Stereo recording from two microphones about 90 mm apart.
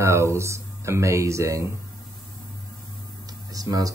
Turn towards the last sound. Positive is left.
turn(degrees=-40)  # may be behind; listen again after turning